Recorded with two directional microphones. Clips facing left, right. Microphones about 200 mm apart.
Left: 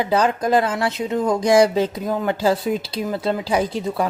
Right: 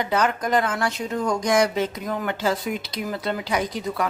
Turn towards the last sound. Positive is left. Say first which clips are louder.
# left 4 dB
turn(degrees=30)  # may be behind; listen again after turning